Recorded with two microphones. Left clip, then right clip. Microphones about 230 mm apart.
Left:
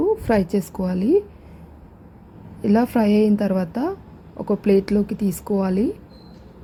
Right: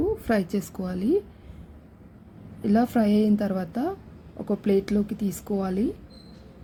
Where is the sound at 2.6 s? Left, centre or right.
Centre.